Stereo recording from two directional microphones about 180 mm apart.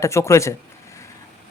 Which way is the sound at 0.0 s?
15° left (ahead or behind).